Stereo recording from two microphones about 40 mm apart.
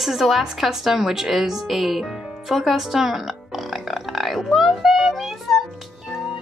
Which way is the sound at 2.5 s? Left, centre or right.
Centre.